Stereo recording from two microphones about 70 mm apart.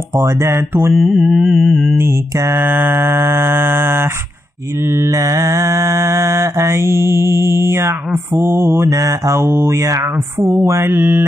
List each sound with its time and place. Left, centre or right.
0.2 s mantra: right
0.9 s music: centre
2.0 s mantra: right
2.6 s mantra: right